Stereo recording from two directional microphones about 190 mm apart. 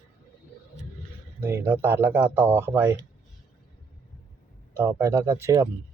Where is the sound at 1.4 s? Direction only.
10° right (ahead or behind).